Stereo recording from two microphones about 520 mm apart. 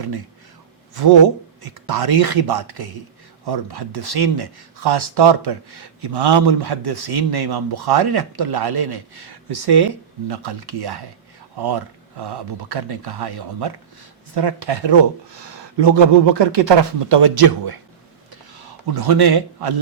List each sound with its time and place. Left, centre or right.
1.6 s speech: right
12.2 s speech: right